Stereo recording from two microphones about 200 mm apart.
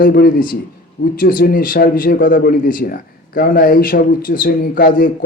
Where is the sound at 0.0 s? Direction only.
45° left (ahead or behind).